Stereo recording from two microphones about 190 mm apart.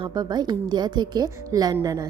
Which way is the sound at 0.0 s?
20° right (ahead or behind).